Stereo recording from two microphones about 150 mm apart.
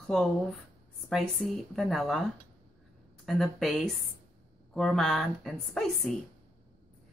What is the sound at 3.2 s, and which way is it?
A woman's voice, centre (ahead or behind).